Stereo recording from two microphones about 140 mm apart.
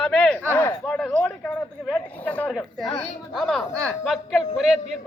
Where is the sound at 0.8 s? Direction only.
5° left (ahead or behind).